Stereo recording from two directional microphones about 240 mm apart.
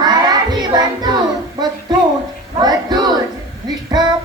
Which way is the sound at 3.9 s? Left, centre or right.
Centre.